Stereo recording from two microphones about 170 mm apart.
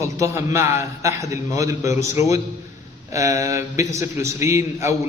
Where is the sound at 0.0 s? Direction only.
15° right (ahead or behind).